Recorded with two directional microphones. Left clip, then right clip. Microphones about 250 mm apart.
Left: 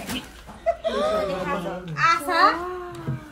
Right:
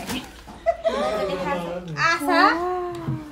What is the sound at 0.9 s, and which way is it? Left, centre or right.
Speech, right.